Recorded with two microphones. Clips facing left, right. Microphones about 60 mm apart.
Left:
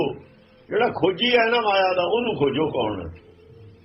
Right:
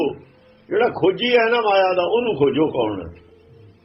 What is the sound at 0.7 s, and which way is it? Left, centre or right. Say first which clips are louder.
A man's voice: right 3 dB; right.